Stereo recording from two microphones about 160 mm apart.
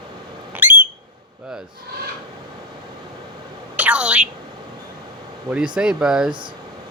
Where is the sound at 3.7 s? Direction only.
10° right (ahead or behind).